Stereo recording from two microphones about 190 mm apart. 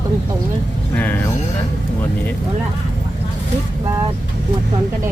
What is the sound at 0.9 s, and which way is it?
Speech, 10° left (ahead or behind).